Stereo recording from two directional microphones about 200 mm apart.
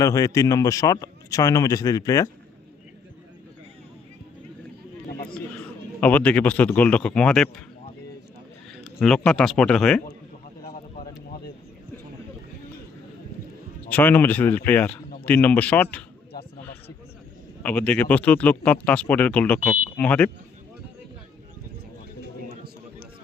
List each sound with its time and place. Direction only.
0.0 s speech: 15° left (ahead or behind)
6.0 s speech: 10° left (ahead or behind)
9.0 s speech: 5° left (ahead or behind)
13.9 s speech: 10° left (ahead or behind)
17.6 s speech: 10° left (ahead or behind)